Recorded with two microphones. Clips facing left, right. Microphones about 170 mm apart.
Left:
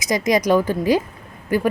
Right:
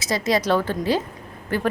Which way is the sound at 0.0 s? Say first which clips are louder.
Left 3 dB; 15° left (ahead or behind).